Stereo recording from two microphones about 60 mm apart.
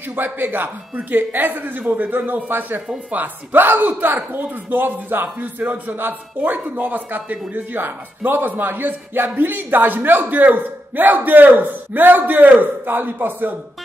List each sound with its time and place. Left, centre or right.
0.1 s speech: right